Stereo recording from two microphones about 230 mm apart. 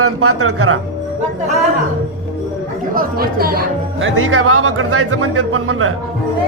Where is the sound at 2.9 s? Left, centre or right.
Right.